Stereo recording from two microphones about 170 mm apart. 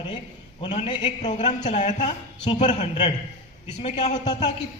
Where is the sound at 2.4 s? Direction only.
30° left (ahead or behind).